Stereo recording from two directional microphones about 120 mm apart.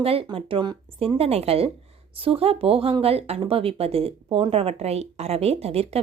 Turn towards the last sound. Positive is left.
turn(degrees=-55)  # may be behind; listen again after turning